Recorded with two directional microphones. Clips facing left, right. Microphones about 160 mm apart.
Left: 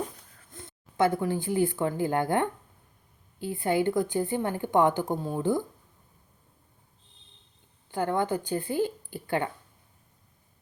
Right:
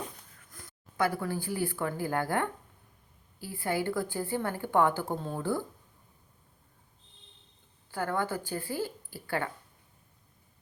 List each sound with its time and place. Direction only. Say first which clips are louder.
0.5 s a woman's voice: left 4 dB; 25° left (ahead or behind)
7.9 s a woman's voice: left 5 dB; 20° left (ahead or behind)